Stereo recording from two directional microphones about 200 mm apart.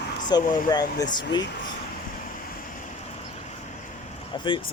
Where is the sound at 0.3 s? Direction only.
20° left (ahead or behind).